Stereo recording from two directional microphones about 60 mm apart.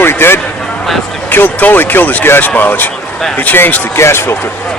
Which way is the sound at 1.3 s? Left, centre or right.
Left.